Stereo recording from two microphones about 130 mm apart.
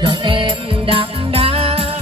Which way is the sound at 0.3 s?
40° right (ahead or behind).